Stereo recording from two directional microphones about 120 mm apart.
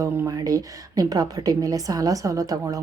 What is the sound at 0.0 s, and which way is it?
A woman's voice, 30° right (ahead or behind).